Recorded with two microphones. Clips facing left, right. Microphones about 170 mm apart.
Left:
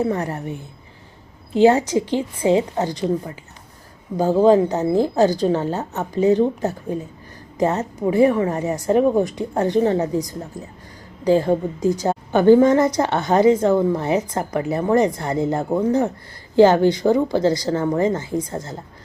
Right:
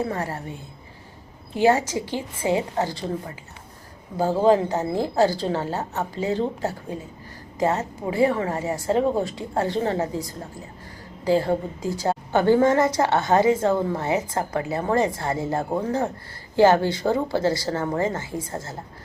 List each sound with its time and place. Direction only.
0.1 s a woman's voice: 20° left (ahead or behind)
1.5 s a woman's voice: 20° left (ahead or behind)
4.2 s a woman's voice: 20° left (ahead or behind)
7.7 s a woman's voice: 20° left (ahead or behind)